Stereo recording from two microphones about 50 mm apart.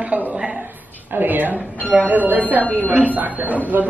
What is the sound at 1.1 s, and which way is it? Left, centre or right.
Speech, right.